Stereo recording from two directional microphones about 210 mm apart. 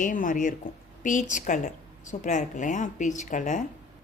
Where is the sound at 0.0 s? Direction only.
40° left (ahead or behind).